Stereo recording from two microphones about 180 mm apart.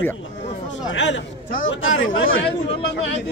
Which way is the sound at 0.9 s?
90° left.